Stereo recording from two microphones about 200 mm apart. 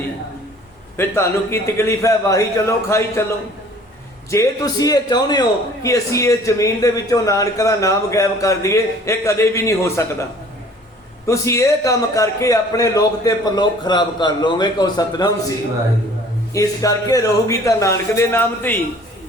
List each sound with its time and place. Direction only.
0.9 s a man's voice: 15° left (ahead or behind)
11.3 s a man's voice: 15° left (ahead or behind)